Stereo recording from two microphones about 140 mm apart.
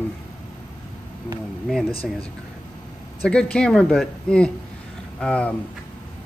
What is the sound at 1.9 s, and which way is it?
Speech, 45° left (ahead or behind).